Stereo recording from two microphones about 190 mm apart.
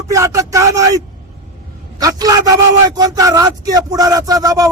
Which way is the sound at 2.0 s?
20° right (ahead or behind).